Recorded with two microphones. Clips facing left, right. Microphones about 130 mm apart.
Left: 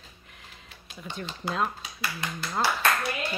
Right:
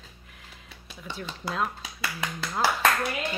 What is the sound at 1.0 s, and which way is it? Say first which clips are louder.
Speech: left 1 dB; centre (ahead or behind).